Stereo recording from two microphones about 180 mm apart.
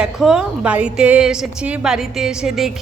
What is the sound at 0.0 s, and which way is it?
A woman's voice, 5° right (ahead or behind).